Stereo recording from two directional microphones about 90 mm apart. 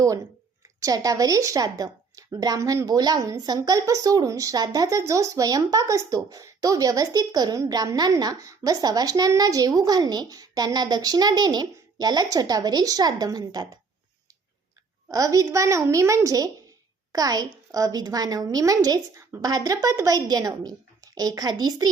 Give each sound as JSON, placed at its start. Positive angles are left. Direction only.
{"t": 0.8, "sound": "a woman's voice", "side_deg": -40}
{"t": 15.1, "sound": "a woman's voice", "side_deg": -40}